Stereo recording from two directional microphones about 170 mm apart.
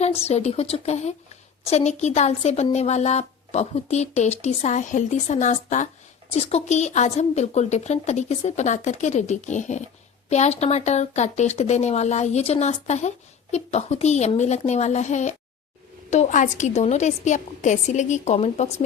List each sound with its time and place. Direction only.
0.0 s a woman's voice: 40° left (ahead or behind)